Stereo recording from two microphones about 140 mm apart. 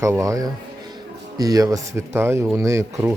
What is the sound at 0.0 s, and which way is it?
A man's voice, 20° right (ahead or behind).